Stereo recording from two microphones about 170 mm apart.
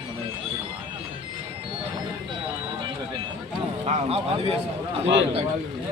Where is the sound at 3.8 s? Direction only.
35° right (ahead or behind).